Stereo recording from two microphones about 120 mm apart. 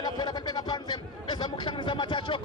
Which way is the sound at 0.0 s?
35° left (ahead or behind).